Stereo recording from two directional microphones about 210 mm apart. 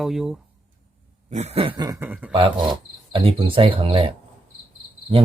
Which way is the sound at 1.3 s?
30° right (ahead or behind).